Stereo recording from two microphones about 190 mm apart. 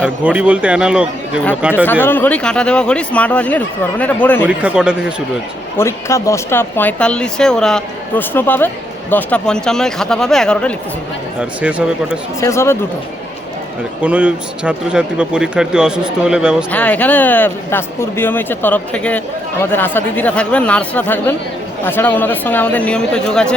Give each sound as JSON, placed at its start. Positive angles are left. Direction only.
{"t": 0.3, "sound": "speech", "side_deg": -5}
{"t": 1.7, "sound": "speech", "side_deg": 10}
{"t": 4.4, "sound": "speech", "side_deg": -5}
{"t": 5.7, "sound": "speech", "side_deg": 15}
{"t": 11.3, "sound": "speech", "side_deg": -5}
{"t": 12.4, "sound": "speech", "side_deg": 15}
{"t": 14.0, "sound": "speech", "side_deg": -5}
{"t": 16.7, "sound": "speech", "side_deg": 10}